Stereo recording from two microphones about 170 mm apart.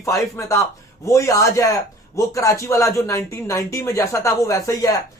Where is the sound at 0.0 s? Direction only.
20° left (ahead or behind).